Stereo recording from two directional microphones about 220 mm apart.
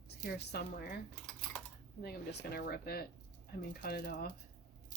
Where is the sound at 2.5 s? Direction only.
45° left (ahead or behind).